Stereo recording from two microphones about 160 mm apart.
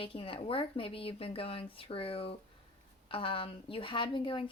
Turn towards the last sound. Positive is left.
turn(degrees=30)  # may be behind; listen again after turning